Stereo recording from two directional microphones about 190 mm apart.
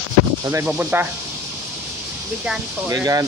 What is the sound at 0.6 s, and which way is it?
Speech, 5° right (ahead or behind).